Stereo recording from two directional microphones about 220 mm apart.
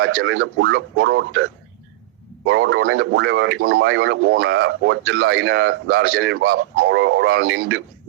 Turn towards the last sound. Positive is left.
turn(degrees=-45)  # may be behind; listen again after turning